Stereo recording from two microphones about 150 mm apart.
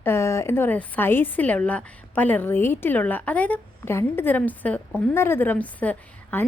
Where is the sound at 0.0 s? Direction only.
15° left (ahead or behind).